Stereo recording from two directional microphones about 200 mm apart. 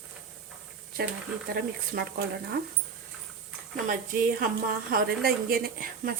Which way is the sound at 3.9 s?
45° right (ahead or behind).